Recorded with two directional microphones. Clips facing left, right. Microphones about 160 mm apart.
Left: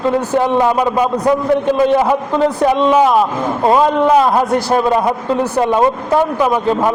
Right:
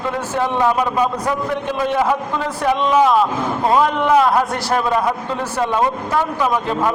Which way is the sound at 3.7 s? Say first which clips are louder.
Left 3 dB; 20° left (ahead or behind).